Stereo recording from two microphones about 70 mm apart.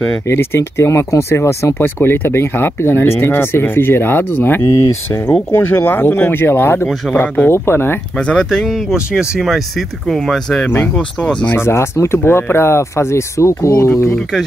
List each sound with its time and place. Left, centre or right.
0.3 s speech: left
8.2 s speech: centre
8.9 s speech: centre
10.6 s speech: left
11.5 s speech: left